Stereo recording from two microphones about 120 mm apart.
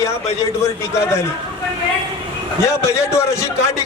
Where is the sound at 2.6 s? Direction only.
25° left (ahead or behind).